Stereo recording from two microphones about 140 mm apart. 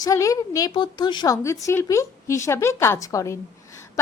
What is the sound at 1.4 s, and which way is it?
A woman's voice, 20° left (ahead or behind).